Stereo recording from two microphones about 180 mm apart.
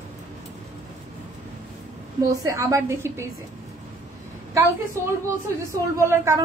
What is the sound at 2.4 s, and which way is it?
Speech, 15° right (ahead or behind).